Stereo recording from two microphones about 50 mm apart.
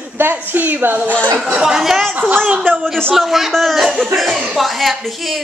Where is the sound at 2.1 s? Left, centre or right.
Right.